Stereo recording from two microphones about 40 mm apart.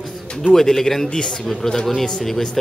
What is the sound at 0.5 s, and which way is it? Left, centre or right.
A man's voice, centre.